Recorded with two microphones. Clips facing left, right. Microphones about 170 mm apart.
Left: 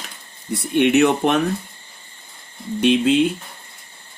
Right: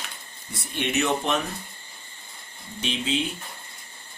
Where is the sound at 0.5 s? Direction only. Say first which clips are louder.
Left 12 dB; 60° left (ahead or behind).